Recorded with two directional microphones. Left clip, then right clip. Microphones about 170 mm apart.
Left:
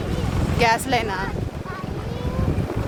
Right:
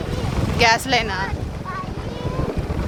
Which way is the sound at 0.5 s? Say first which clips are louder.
Right 3 dB; 15° left (ahead or behind).